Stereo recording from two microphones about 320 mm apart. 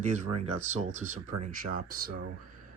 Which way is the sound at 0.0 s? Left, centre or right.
Right.